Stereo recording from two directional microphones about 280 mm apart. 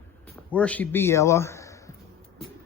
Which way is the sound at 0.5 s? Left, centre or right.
Centre.